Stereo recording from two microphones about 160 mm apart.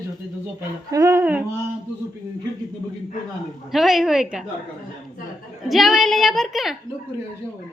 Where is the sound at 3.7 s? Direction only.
Centre (ahead or behind).